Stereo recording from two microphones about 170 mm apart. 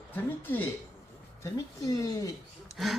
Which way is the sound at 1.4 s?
20° left (ahead or behind).